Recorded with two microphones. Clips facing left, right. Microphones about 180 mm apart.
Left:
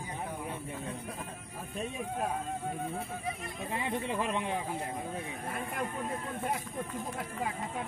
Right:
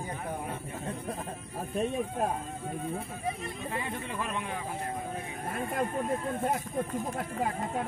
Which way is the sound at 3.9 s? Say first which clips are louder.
Left 3 dB; 20° left (ahead or behind).